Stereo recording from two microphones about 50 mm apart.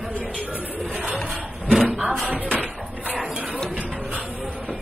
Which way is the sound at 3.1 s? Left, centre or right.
Centre.